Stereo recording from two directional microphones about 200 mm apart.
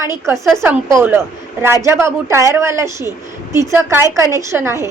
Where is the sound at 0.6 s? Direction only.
15° right (ahead or behind).